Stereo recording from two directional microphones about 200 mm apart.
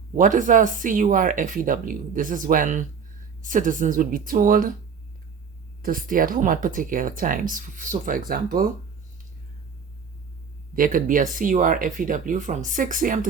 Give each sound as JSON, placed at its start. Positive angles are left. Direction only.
{"t": 0.2, "sound": "speech", "side_deg": -40}
{"t": 5.8, "sound": "speech", "side_deg": -45}
{"t": 10.8, "sound": "speech", "side_deg": -45}